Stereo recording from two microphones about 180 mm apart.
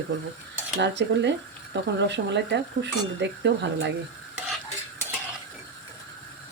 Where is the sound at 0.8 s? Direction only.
75° right (ahead or behind).